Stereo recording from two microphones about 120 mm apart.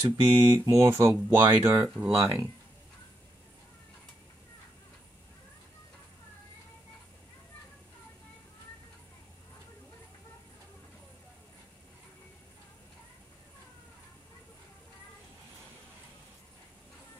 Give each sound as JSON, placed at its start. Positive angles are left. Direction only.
{"t": 0.0, "sound": "speech", "side_deg": -30}